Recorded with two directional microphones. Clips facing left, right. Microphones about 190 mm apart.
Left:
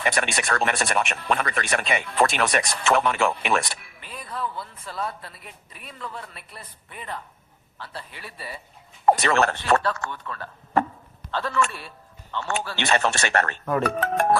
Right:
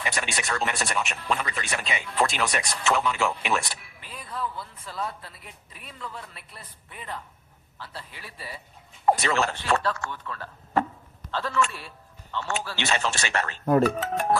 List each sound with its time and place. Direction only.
0.0 s speech: 60° left (ahead or behind)